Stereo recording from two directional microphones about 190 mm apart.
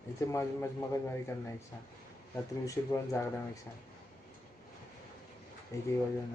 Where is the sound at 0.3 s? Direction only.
15° left (ahead or behind).